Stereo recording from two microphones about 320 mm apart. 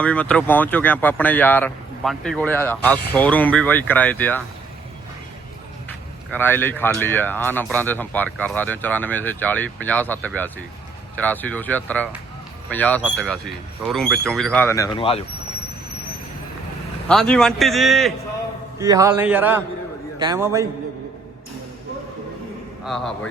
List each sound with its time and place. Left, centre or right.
0.0 s speech: centre
6.3 s speech: centre
17.1 s a man's voice: centre
22.8 s speech: centre